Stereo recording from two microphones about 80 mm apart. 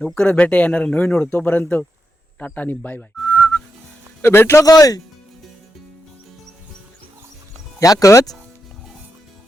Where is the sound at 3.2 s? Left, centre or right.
Centre.